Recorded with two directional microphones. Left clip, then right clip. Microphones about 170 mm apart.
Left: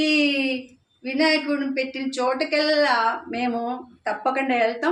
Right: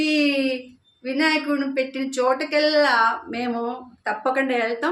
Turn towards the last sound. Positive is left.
turn(degrees=-25)  # may be behind; listen again after turning